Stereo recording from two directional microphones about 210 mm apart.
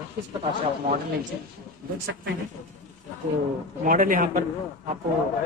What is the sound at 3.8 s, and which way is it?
A man's voice, 40° right (ahead or behind).